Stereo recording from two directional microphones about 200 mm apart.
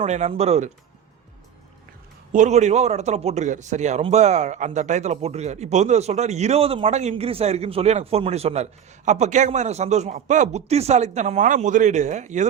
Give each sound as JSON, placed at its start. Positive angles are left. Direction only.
{"t": 0.0, "sound": "a man's voice", "side_deg": -30}
{"t": 2.3, "sound": "a man's voice", "side_deg": -35}